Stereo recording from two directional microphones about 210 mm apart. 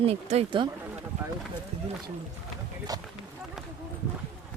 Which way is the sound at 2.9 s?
15° right (ahead or behind).